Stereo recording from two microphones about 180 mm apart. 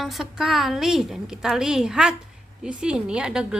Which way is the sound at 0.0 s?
Centre (ahead or behind).